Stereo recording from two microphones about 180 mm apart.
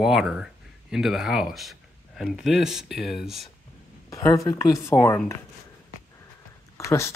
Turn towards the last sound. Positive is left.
turn(degrees=15)  # may be behind; listen again after turning